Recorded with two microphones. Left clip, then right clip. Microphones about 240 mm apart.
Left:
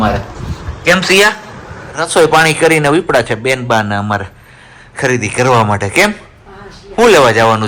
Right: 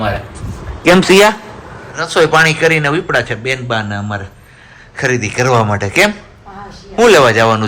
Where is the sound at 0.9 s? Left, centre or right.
Centre.